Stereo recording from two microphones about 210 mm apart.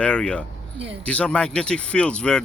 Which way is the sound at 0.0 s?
5° left (ahead or behind).